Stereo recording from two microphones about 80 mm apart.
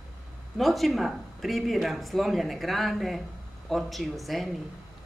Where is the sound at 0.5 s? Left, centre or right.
Centre.